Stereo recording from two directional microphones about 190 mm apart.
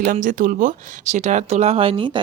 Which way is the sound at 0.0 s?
45° right (ahead or behind).